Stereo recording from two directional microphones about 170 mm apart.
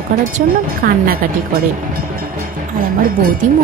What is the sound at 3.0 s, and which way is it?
Speech, 55° right (ahead or behind).